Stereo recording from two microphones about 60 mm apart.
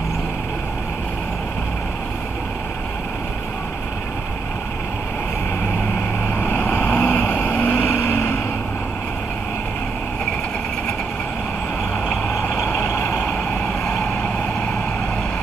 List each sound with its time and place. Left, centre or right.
6.4 s vehicle: left
12.7 s vehicle: left